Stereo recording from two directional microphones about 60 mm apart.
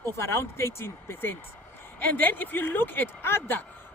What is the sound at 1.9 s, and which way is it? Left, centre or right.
Speech, left.